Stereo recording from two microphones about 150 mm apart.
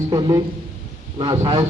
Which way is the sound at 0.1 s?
25° right (ahead or behind).